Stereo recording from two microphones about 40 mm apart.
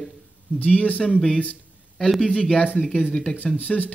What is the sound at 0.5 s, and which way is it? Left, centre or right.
Speech, left.